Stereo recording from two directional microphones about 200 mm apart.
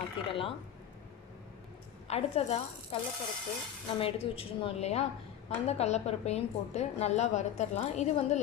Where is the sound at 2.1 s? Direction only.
30° left (ahead or behind).